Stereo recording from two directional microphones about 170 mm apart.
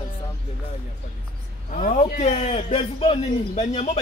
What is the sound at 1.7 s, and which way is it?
A man's voice, 50° left (ahead or behind).